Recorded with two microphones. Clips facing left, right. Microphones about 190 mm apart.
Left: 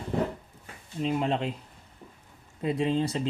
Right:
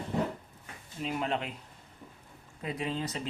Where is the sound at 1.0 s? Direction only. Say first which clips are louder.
Left 5 dB; 25° left (ahead or behind).